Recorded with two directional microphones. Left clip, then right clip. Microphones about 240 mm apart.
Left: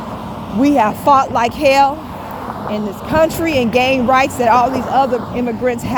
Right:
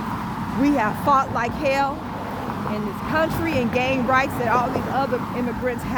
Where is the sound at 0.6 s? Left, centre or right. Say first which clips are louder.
Left 8 dB; left.